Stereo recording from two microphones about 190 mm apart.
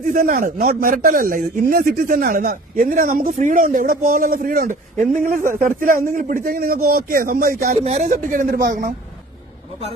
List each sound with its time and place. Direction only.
0.0 s a man's voice: 45° right (ahead or behind)
7.8 s a man's voice: 35° right (ahead or behind); by 8.9 s 55° right (ahead or behind)